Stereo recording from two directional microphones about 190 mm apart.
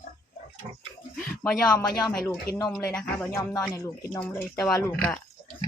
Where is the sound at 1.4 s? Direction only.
5° left (ahead or behind).